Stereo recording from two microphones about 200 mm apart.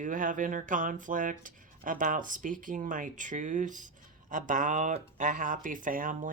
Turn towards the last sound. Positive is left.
turn(degrees=-40)  # may be behind; listen again after turning